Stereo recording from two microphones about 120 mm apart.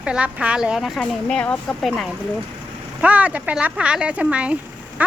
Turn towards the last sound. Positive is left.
turn(degrees=-10)  # may be behind; listen again after turning